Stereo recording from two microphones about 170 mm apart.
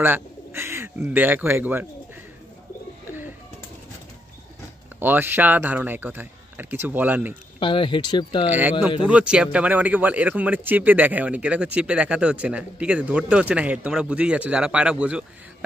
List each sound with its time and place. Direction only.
0.0 s speech: 15° right (ahead or behind)
5.0 s speech: 10° right (ahead or behind)
7.6 s speech: 30° left (ahead or behind)
8.5 s speech: 10° right (ahead or behind)